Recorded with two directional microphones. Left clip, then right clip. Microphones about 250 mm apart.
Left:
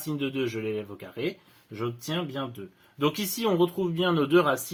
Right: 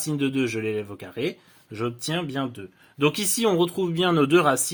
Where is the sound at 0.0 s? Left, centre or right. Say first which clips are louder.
Right 4 dB; right.